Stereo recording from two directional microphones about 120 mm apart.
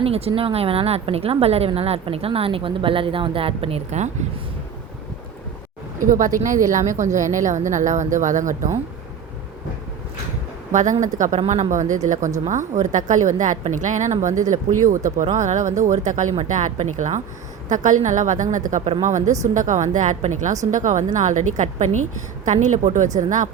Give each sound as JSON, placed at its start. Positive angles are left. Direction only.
{"t": 0.0, "sound": "a woman's voice", "side_deg": -55}
{"t": 6.0, "sound": "a woman's voice", "side_deg": -90}
{"t": 10.7, "sound": "a woman's voice", "side_deg": -90}
{"t": 11.3, "sound": "speech", "side_deg": -65}
{"t": 11.7, "sound": "a woman's voice", "side_deg": -90}